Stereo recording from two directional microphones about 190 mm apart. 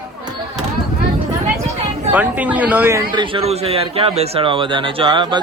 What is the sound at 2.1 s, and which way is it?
Speech, 10° right (ahead or behind).